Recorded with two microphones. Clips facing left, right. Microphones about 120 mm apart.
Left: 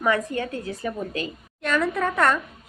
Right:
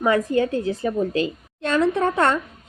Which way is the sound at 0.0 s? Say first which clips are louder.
Right 5 dB; 30° right (ahead or behind).